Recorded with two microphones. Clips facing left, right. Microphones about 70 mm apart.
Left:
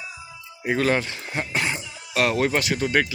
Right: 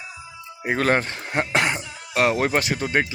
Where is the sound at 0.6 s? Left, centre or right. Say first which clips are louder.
Right 1 dB; right.